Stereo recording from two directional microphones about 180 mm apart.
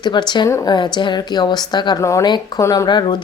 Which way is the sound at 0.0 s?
25° left (ahead or behind).